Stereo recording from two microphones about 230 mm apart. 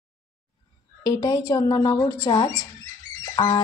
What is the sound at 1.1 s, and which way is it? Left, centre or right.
Speech, centre.